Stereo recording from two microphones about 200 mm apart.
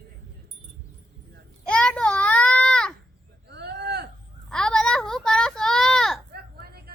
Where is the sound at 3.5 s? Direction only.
55° right (ahead or behind).